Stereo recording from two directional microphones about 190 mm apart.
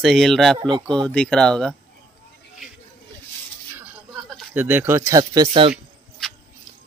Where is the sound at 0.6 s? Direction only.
25° right (ahead or behind).